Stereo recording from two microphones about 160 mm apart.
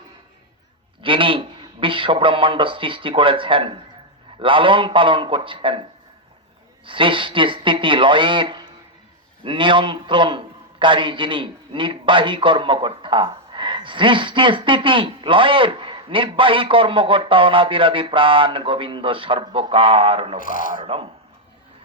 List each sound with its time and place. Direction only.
1.0 s a man's voice: 30° right (ahead or behind)
6.8 s a man's voice: 30° right (ahead or behind)
20.4 s speech: 60° left (ahead or behind)
20.8 s a man's voice: 35° right (ahead or behind)